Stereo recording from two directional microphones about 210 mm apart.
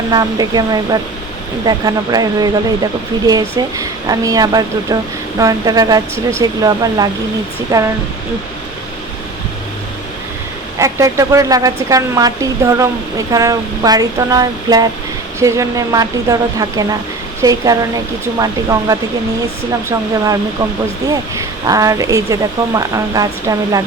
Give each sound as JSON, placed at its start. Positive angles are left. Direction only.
{"t": 0.1, "sound": "speech", "side_deg": -20}
{"t": 10.8, "sound": "speech", "side_deg": -15}